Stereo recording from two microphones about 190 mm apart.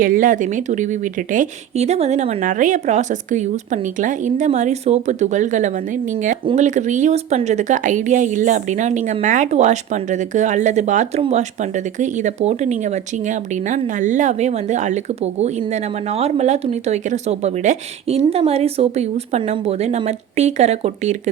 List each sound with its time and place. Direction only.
0.0 s speech: 45° right (ahead or behind)
6.4 s speech: 25° right (ahead or behind)
6.7 s speech: 40° right (ahead or behind)